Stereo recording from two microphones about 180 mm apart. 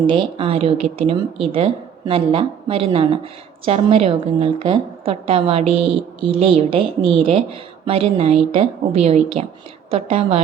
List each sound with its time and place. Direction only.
0.1 s a woman's voice: 30° right (ahead or behind)